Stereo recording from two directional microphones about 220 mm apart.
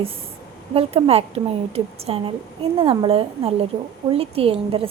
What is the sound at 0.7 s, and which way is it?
A woman's voice, 25° right (ahead or behind).